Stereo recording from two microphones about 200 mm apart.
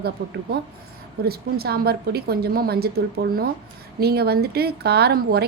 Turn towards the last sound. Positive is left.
turn(degrees=-55)  # may be behind; listen again after turning